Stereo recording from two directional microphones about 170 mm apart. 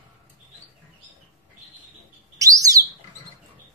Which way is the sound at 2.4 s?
20° right (ahead or behind).